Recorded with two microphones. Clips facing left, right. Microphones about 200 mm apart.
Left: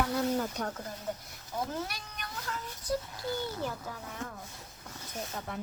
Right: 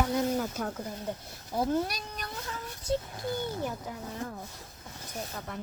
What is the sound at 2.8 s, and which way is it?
Speech, 25° right (ahead or behind).